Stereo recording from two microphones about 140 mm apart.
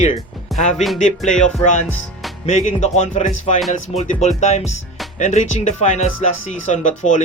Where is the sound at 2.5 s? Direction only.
55° left (ahead or behind).